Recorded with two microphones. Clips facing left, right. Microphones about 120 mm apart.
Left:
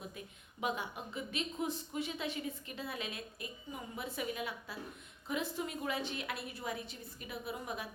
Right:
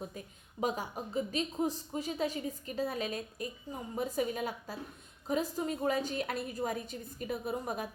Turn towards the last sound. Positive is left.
turn(degrees=-45)  # may be behind; listen again after turning